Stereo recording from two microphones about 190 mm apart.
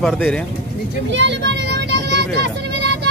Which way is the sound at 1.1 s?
65° right (ahead or behind).